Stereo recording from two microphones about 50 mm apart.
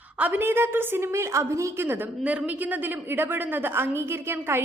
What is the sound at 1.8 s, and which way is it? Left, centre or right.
Speech, right.